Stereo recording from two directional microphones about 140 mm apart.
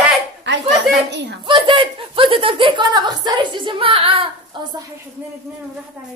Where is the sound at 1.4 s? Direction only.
35° right (ahead or behind).